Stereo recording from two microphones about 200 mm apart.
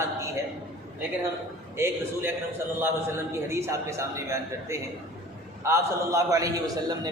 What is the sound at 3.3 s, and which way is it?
A man's voice, 15° right (ahead or behind).